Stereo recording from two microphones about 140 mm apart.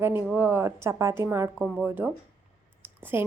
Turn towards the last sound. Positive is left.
turn(degrees=-15)  # may be behind; listen again after turning